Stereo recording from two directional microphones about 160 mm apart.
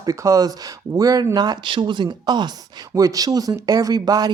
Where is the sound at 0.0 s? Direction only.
20° right (ahead or behind).